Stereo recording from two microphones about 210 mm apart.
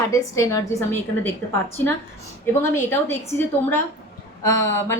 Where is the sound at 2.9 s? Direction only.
10° left (ahead or behind).